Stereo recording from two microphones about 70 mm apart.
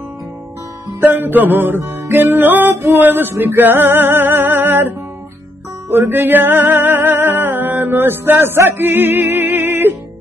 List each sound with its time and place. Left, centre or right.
1.0 s music: right